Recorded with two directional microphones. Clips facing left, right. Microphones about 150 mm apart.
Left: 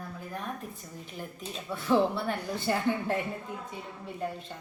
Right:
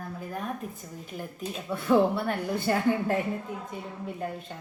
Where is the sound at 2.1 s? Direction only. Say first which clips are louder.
Right 3 dB; 50° right (ahead or behind).